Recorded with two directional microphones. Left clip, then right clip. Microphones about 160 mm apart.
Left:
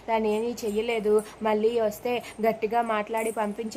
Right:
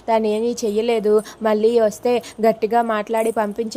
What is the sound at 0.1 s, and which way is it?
A woman's voice, 35° right (ahead or behind).